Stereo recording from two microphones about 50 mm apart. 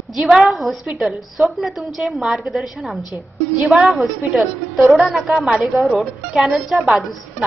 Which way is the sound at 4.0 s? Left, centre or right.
Centre.